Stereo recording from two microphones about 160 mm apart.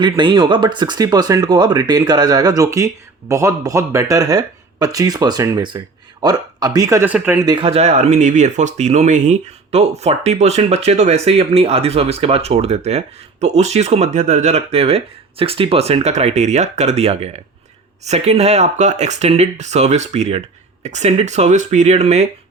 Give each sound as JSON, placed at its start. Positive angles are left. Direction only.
{"t": 0.0, "sound": "speech", "side_deg": -30}
{"t": 7.4, "sound": "speech", "side_deg": -30}